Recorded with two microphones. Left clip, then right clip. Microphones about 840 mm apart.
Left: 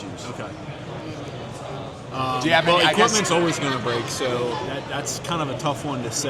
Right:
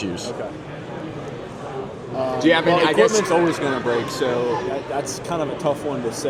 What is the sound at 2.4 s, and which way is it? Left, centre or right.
Speech, centre.